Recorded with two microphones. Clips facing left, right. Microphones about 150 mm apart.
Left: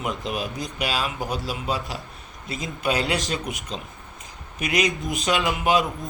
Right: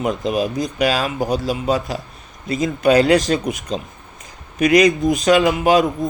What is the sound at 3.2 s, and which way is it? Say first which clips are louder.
Speech: right 9 dB; 40° right (ahead or behind).